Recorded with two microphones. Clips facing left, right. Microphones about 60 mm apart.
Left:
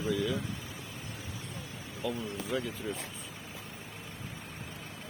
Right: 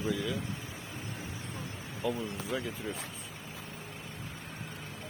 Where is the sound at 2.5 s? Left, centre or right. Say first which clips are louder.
Left 2 dB; centre.